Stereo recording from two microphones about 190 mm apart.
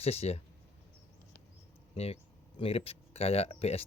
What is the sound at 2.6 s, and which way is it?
Speech, 30° left (ahead or behind).